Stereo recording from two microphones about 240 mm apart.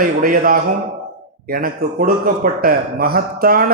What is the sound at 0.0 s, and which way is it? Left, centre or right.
Speech, right.